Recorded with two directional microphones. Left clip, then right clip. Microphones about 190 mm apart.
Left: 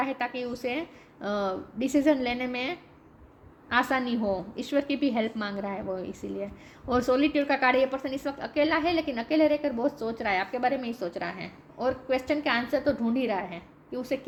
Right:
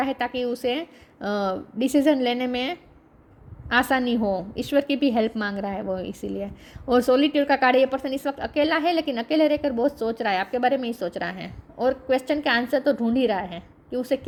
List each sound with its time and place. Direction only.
0.0 s a woman's voice: 45° right (ahead or behind)